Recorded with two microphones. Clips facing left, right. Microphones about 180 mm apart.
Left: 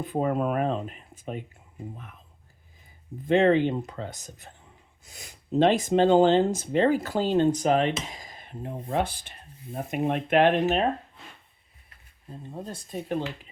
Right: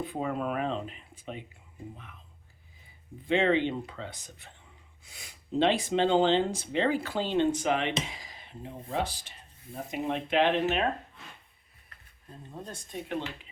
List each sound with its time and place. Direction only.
0.0 s speech: 45° left (ahead or behind)
3.2 s speech: 45° left (ahead or behind)
12.7 s speech: 40° left (ahead or behind)